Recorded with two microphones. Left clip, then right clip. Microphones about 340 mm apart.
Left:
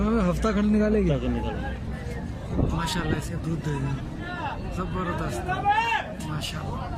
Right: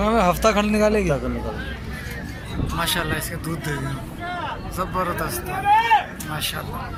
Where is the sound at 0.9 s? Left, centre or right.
Right.